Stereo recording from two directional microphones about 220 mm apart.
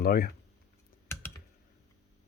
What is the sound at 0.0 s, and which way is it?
Speech, 45° left (ahead or behind).